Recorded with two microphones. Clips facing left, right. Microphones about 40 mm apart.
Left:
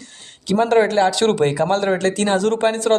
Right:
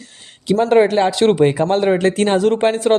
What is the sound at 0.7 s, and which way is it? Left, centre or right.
A man's voice, centre.